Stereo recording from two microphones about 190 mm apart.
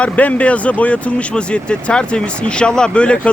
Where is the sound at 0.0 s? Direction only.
5° left (ahead or behind).